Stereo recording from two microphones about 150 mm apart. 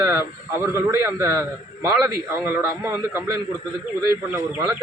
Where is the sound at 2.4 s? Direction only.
15° right (ahead or behind).